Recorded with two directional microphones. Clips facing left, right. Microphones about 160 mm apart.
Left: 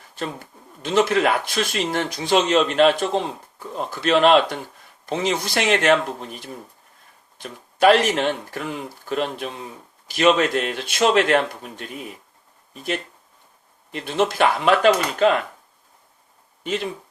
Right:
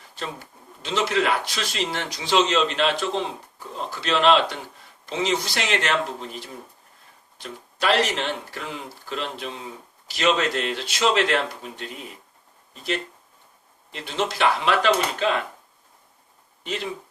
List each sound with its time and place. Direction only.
0.2 s speech: 50° left (ahead or behind)